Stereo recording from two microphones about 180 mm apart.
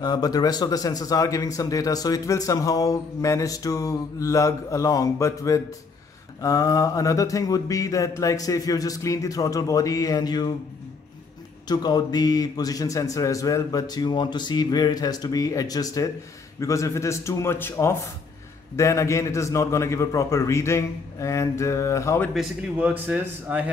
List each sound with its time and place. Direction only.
0.0 s speech: 20° left (ahead or behind)
11.6 s a man's voice: 20° left (ahead or behind)
22.3 s speech: 5° right (ahead or behind)